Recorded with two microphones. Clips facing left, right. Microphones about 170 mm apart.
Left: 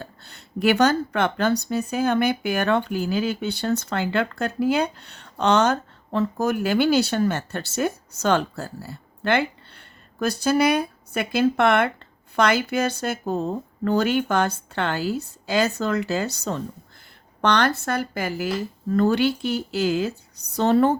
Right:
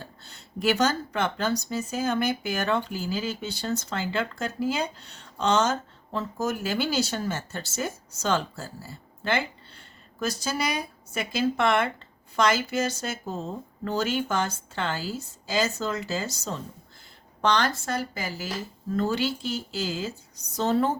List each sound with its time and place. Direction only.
0.0 s speech: 60° left (ahead or behind)